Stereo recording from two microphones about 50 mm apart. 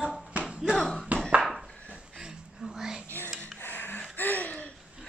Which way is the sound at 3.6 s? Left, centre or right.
Left.